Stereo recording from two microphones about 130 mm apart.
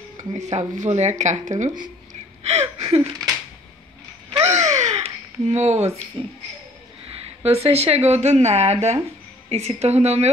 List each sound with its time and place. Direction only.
0.2 s speech: 65° right (ahead or behind)
2.4 s a sound: 55° right (ahead or behind)
4.4 s babbling: 60° right (ahead or behind)
6.2 s speech: 40° right (ahead or behind)